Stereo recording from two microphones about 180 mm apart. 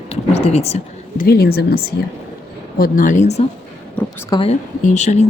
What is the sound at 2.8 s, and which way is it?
Speech, 45° left (ahead or behind).